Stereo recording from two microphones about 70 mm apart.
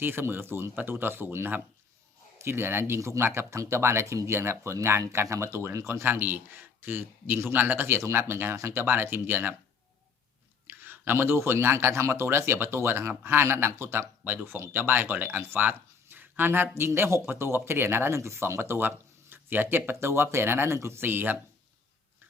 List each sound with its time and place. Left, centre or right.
0.0 s speech: right
10.7 s speech: right